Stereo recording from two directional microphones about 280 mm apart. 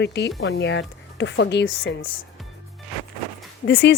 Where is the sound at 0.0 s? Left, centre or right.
Left.